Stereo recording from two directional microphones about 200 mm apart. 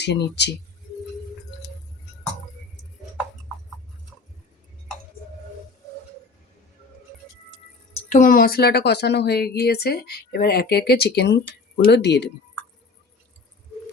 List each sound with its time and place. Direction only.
0.0 s speech: 60° left (ahead or behind)
8.1 s a woman's voice: 45° left (ahead or behind); by 12.3 s 60° left (ahead or behind)